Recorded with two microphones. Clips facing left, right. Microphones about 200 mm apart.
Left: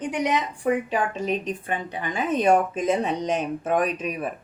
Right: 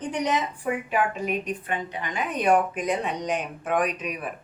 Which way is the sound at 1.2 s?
30° left (ahead or behind).